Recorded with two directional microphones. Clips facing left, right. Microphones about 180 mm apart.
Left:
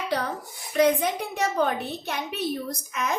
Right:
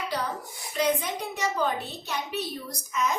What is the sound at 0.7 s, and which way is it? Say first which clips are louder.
A woman's voice: left 5 dB; 55° left (ahead or behind).